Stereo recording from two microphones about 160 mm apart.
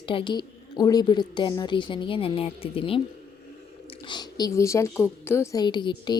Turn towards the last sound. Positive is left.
turn(degrees=30)  # may be behind; listen again after turning